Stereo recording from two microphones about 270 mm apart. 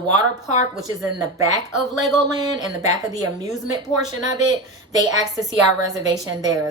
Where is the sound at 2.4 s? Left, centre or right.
Centre.